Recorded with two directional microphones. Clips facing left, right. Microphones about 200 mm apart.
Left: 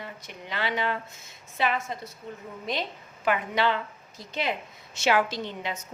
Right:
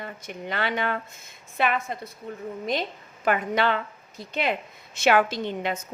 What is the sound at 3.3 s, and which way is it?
A woman's voice, 50° right (ahead or behind).